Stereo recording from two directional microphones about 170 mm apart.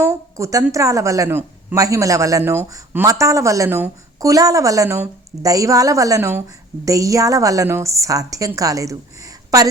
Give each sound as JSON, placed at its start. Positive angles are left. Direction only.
{"t": 0.0, "sound": "a woman's voice", "side_deg": -15}